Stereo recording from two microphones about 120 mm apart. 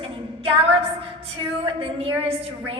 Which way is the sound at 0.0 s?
55° right (ahead or behind).